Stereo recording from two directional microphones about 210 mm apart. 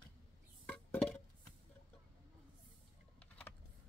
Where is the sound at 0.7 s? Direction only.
5° left (ahead or behind).